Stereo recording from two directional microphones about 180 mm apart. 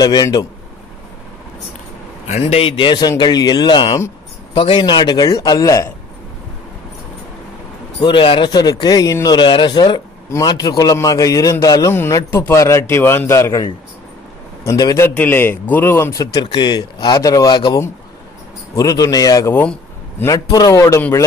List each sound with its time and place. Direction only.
0.0 s speech: 20° left (ahead or behind)
2.2 s a man's voice: 35° left (ahead or behind); by 5.9 s 20° left (ahead or behind)
8.0 s a man's voice: 25° left (ahead or behind); by 20.2 s 10° left (ahead or behind)
20.2 s a man's voice: 20° left (ahead or behind)